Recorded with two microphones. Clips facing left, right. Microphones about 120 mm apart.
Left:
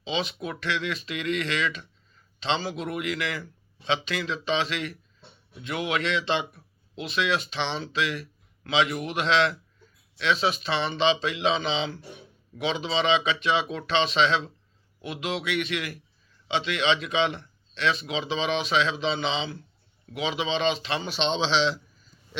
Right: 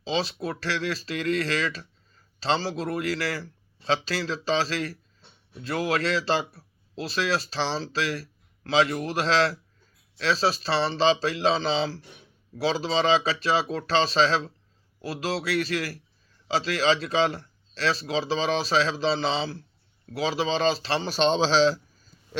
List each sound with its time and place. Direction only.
0.0 s speech: 35° right (ahead or behind)